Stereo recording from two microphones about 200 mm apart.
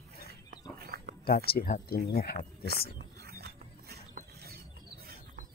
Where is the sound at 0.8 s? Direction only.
50° right (ahead or behind).